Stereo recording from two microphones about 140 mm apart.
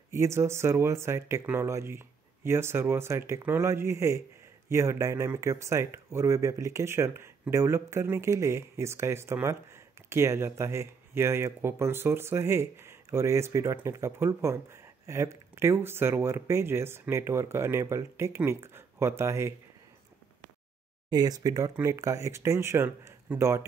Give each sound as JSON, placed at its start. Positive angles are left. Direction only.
{"t": 0.1, "sound": "speech", "side_deg": -20}
{"t": 21.1, "sound": "speech", "side_deg": -30}